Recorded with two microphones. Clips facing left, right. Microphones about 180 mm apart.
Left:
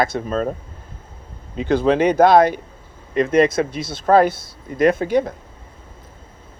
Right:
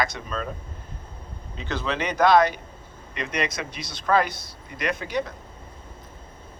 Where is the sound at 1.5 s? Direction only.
50° left (ahead or behind).